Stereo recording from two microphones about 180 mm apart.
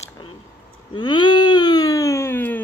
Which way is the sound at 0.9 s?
25° left (ahead or behind).